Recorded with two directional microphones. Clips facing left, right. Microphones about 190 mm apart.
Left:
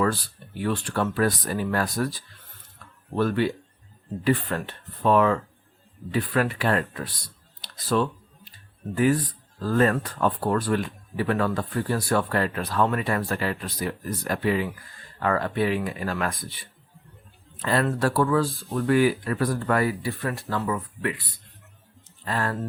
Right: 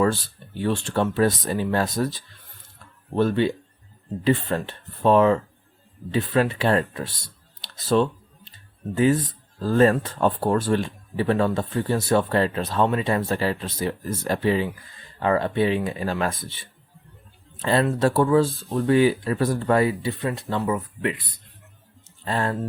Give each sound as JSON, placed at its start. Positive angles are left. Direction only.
{"t": 0.0, "sound": "speech", "side_deg": -25}
{"t": 7.6, "sound": "a sound", "side_deg": -25}
{"t": 9.0, "sound": "speech", "side_deg": -20}